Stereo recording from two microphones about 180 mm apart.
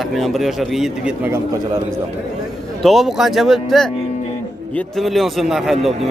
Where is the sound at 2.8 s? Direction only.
Centre (ahead or behind).